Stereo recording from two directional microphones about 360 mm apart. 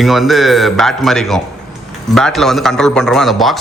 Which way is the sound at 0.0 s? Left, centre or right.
Centre.